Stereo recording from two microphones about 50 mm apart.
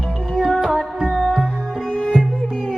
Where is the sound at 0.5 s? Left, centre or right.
Centre.